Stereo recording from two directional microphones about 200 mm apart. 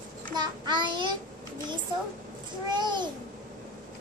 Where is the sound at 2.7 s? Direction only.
20° right (ahead or behind).